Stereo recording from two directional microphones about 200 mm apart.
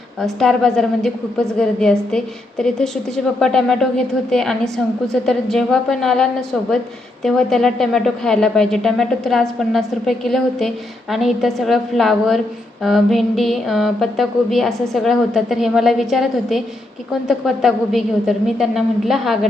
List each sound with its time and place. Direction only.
0.3 s a woman's voice: centre (ahead or behind)